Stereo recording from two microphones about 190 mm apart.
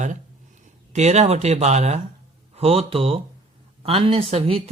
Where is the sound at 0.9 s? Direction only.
35° right (ahead or behind).